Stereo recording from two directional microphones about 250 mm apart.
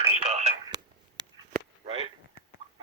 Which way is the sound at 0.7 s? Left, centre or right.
Right.